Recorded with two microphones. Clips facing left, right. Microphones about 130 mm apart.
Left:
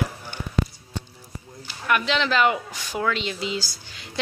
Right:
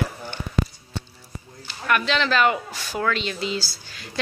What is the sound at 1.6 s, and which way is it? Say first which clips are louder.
Speech: right 1 dB; 15° left (ahead or behind).